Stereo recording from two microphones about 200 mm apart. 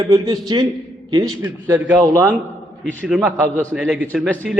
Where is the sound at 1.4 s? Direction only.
10° right (ahead or behind).